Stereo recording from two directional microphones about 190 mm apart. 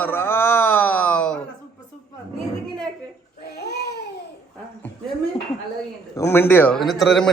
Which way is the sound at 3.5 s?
55° left (ahead or behind).